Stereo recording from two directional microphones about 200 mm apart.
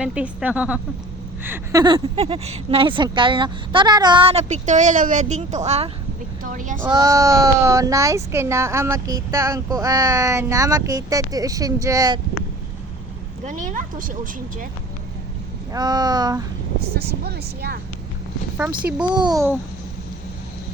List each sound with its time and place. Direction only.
0.0 s speech: 5° right (ahead or behind)
2.1 s speech: 30° right (ahead or behind)
6.9 s speech: 15° right (ahead or behind)
13.4 s speech: 40° right (ahead or behind)
15.7 s speech: 20° right (ahead or behind)
16.9 s speech: 55° right (ahead or behind)
19.2 s speech: 15° right (ahead or behind)